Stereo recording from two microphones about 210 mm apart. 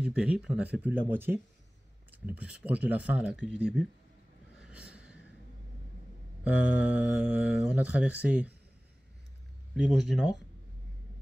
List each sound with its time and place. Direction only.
0.0 s speech: 5° right (ahead or behind)
4.6 s a sound: 5° right (ahead or behind)
6.4 s speech: 5° right (ahead or behind)
9.8 s speech: centre (ahead or behind)